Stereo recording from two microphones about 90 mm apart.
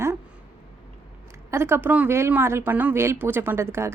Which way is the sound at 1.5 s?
25° right (ahead or behind).